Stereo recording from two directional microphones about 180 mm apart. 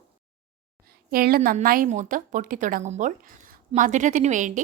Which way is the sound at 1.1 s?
55° right (ahead or behind).